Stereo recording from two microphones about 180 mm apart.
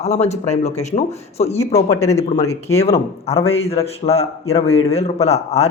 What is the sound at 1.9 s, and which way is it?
Speech, 15° left (ahead or behind).